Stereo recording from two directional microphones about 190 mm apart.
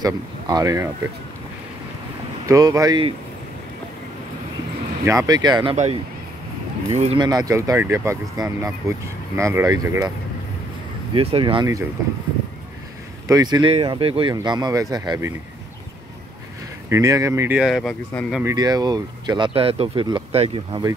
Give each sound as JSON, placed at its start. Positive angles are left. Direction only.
{"t": 0.0, "sound": "speech", "side_deg": -20}
{"t": 2.4, "sound": "speech", "side_deg": -20}
{"t": 5.0, "sound": "speech", "side_deg": -15}
{"t": 5.7, "sound": "speech", "side_deg": -35}
{"t": 7.2, "sound": "speech", "side_deg": -20}
{"t": 11.1, "sound": "speech", "side_deg": -25}
{"t": 13.3, "sound": "speech", "side_deg": -20}
{"t": 16.9, "sound": "speech", "side_deg": -15}
{"t": 18.4, "sound": "speech", "side_deg": -20}